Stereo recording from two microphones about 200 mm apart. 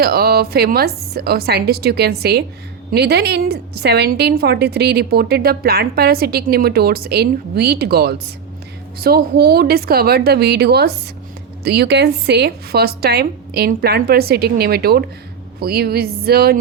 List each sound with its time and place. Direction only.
0.0 s a woman's voice: 50° right (ahead or behind)